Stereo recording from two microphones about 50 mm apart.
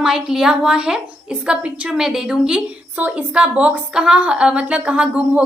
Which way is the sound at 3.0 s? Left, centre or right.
Right.